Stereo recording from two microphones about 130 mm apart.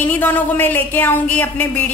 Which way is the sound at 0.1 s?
15° left (ahead or behind).